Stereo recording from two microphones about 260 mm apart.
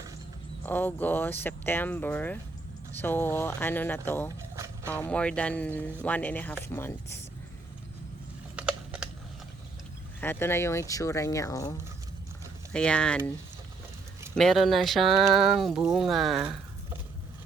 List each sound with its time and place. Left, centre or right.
0.6 s speech: centre
8.5 s a sound: centre
10.2 s speech: centre
12.7 s speech: centre
14.3 s speech: centre